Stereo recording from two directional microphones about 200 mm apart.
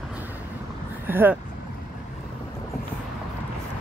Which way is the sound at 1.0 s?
10° right (ahead or behind).